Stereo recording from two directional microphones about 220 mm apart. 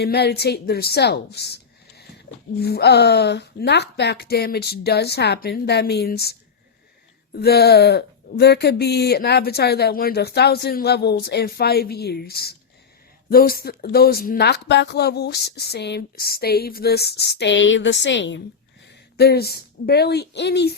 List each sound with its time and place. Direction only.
0.0 s a woman's voice: 45° left (ahead or behind)
7.3 s a woman's voice: 45° left (ahead or behind)